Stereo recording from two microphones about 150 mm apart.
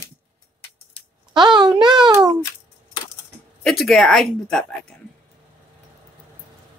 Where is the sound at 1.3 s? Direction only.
30° right (ahead or behind).